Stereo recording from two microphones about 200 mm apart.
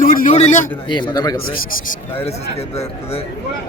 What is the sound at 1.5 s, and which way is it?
Speech, 45° left (ahead or behind).